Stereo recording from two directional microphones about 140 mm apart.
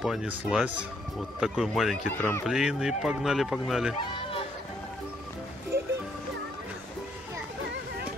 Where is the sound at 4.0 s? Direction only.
40° left (ahead or behind).